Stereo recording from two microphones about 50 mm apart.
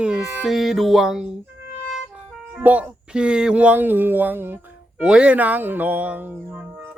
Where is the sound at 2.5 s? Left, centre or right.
Right.